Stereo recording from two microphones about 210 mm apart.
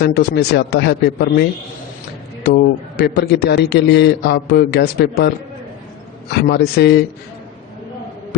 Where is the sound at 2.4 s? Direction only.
50° left (ahead or behind).